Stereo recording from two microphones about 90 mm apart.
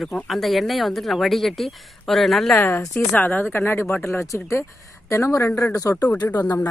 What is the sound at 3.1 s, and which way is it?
Speech, 20° left (ahead or behind).